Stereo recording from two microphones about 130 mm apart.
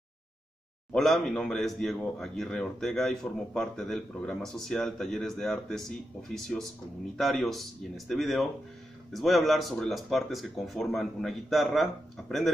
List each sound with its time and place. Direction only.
0.9 s a man's voice: centre (ahead or behind)